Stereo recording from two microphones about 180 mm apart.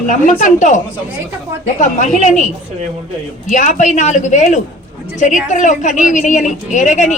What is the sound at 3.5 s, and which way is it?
A woman's voice, 40° left (ahead or behind).